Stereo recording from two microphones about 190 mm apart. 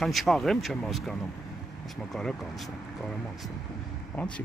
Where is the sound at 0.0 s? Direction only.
Centre (ahead or behind).